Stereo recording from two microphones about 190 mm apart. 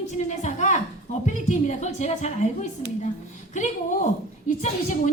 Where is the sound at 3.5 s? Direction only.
40° left (ahead or behind).